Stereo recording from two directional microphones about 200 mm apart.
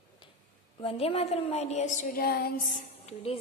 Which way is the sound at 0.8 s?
30° left (ahead or behind).